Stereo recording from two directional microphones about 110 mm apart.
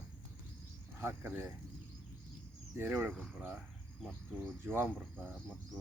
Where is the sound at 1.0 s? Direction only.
25° right (ahead or behind).